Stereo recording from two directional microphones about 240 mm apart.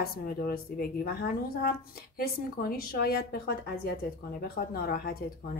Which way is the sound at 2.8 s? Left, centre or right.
Left.